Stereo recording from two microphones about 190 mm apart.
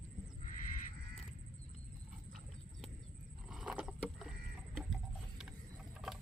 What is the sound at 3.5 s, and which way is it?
Rowboat, 5° right (ahead or behind).